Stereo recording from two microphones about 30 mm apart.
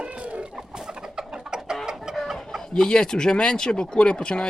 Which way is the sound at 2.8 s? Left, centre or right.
Left.